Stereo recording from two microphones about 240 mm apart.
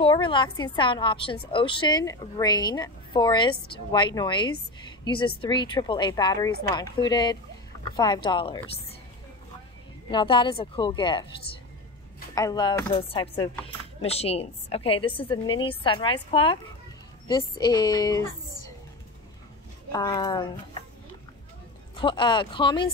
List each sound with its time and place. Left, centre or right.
0.0 s a woman's voice: centre
10.1 s a woman's voice: centre
12.4 s a woman's voice: centre
19.9 s a woman's voice: centre
21.9 s a woman's voice: centre